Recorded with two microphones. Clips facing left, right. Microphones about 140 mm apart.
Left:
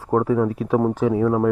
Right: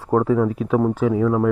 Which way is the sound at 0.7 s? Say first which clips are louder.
Even; 30° left (ahead or behind).